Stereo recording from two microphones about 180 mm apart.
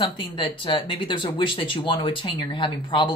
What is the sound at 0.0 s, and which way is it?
Speech, 30° left (ahead or behind).